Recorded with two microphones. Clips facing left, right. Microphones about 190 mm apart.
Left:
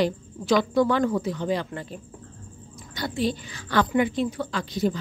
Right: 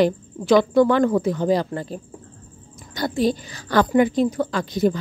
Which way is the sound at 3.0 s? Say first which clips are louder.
Right 5 dB; 40° right (ahead or behind).